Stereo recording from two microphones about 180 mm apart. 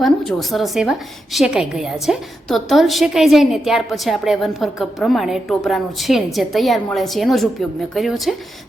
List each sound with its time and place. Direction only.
0.0 s a woman's voice: centre (ahead or behind)